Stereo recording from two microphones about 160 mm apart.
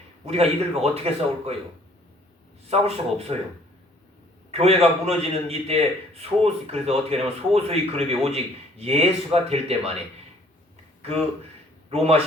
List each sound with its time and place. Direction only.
0.3 s speech: 40° right (ahead or behind)
2.6 s speech: 40° right (ahead or behind)
4.5 s speech: 40° right (ahead or behind)
11.9 s speech: 40° right (ahead or behind)